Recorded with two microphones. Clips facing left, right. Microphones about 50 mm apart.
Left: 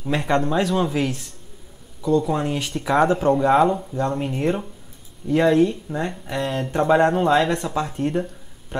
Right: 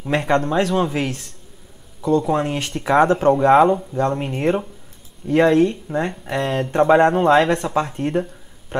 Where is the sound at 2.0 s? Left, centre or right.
Centre.